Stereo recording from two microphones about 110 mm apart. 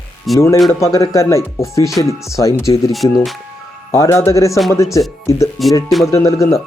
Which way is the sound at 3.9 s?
25° left (ahead or behind).